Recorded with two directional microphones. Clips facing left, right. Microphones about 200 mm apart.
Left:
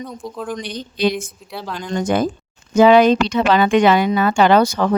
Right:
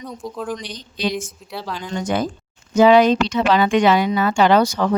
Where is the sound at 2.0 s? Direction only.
50° left (ahead or behind).